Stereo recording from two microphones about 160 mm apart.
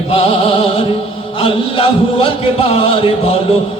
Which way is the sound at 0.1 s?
35° left (ahead or behind).